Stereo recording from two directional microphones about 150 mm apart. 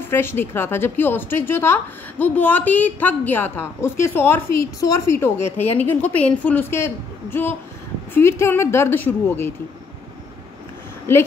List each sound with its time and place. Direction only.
0.0 s a woman's voice: 15° left (ahead or behind)